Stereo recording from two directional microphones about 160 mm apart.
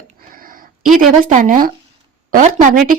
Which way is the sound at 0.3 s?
60° right (ahead or behind).